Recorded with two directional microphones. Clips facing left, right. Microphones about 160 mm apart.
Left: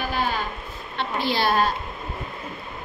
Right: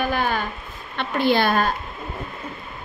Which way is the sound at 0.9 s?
55° right (ahead or behind).